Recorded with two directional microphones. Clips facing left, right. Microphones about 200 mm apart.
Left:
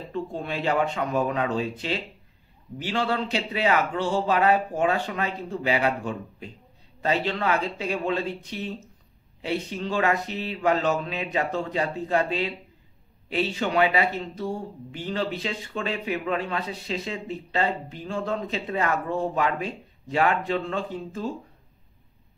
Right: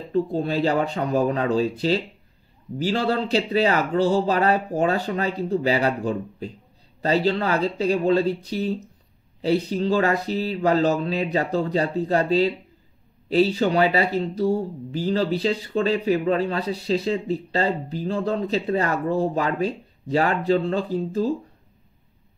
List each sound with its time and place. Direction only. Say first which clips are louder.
0.1 s speech: right 9 dB; 35° right (ahead or behind)